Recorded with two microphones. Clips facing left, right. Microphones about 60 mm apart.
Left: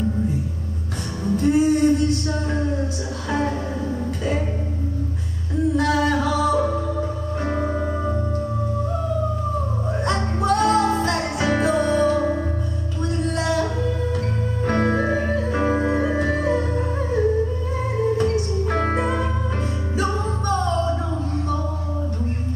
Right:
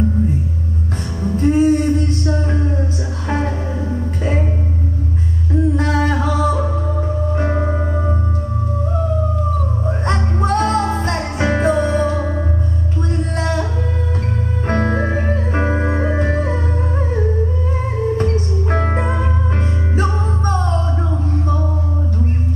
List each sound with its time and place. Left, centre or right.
1.3 s a sound: right
3.4 s music: centre
4.2 s music: right
5.5 s a sound: right
7.0 s music: right
9.8 s music: right
11.7 s music: right
13.1 s music: right
14.7 s music: right
18.1 s music: right
18.9 s music: right